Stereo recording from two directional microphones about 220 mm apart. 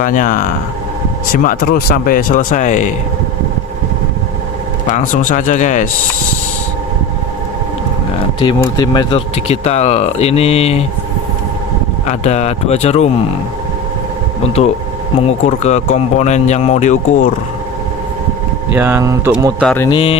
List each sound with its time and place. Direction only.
0.0 s speech: 35° left (ahead or behind)
4.9 s speech: 35° left (ahead or behind)
8.6 s speech: 20° left (ahead or behind)
12.0 s speech: 30° left (ahead or behind)
15.3 s speech: 30° left (ahead or behind)
18.7 s speech: 10° right (ahead or behind)
19.6 s mantra: 10° left (ahead or behind)
19.9 s speech: 25° left (ahead or behind)